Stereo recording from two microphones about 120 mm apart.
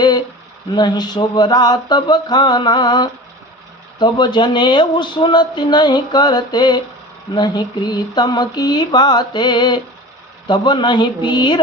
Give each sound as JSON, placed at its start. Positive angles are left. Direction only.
{"t": 0.7, "sound": "speech", "side_deg": 35}